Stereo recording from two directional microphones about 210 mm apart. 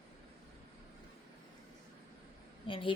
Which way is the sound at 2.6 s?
25° left (ahead or behind).